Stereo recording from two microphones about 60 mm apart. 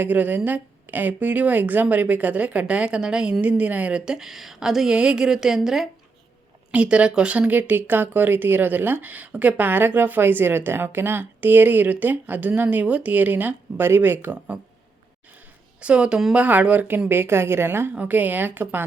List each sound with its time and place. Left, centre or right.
0.0 s a woman's voice: right
3.4 s a woman's voice: right
4.0 s speech: centre
6.7 s speech: centre; by 14.3 s right
15.8 s speech: centre; by 17.9 s right
17.9 s speech: right